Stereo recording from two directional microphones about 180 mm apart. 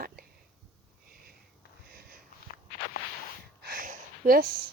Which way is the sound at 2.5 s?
40° left (ahead or behind).